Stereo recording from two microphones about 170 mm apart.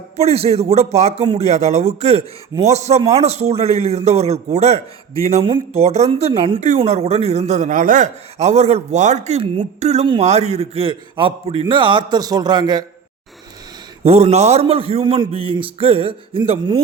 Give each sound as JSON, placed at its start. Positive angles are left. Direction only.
{"t": 0.2, "sound": "speech", "side_deg": -35}
{"t": 14.0, "sound": "speech", "side_deg": -35}